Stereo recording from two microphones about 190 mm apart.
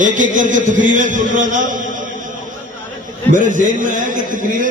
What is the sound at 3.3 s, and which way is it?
Speech, 40° right (ahead or behind).